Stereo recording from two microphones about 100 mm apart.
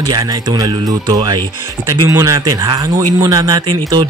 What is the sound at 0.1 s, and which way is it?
Speech, 40° right (ahead or behind).